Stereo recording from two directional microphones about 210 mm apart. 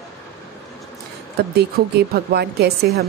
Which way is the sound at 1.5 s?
45° right (ahead or behind).